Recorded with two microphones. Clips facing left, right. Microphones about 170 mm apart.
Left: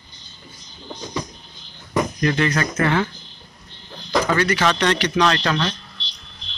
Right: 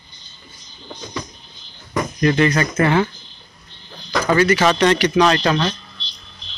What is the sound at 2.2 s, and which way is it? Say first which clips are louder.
Speech: right 7 dB; 15° right (ahead or behind).